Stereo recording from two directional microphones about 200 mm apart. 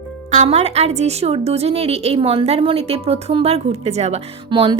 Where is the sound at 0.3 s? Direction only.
35° right (ahead or behind).